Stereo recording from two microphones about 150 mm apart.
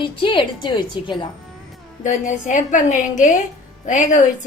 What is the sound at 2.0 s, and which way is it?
A woman's voice, 60° left (ahead or behind).